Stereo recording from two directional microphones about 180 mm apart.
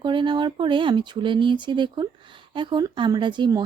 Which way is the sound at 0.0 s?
25° right (ahead or behind).